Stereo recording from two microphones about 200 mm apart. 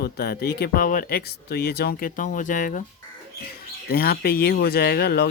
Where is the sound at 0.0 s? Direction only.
50° left (ahead or behind).